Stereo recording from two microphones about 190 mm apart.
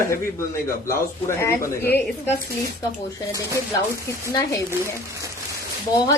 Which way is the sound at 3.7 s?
15° left (ahead or behind).